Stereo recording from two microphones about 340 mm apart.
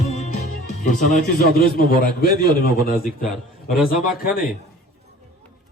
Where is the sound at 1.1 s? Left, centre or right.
Left.